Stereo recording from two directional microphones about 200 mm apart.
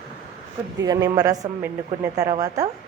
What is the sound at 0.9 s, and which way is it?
A woman's voice, 20° right (ahead or behind).